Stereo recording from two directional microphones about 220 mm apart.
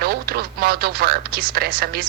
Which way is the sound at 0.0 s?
45° right (ahead or behind).